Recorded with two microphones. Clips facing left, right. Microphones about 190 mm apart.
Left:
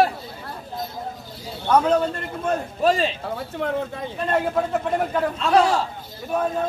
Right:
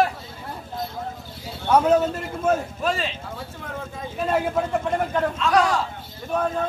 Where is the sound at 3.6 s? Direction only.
70° left (ahead or behind).